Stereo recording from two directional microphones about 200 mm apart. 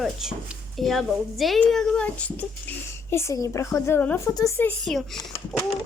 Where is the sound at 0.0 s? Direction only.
Centre (ahead or behind); by 4.7 s 15° left (ahead or behind).